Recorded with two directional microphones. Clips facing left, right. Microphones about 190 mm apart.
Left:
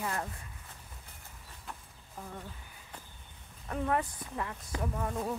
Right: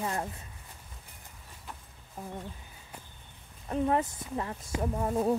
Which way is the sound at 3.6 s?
25° right (ahead or behind).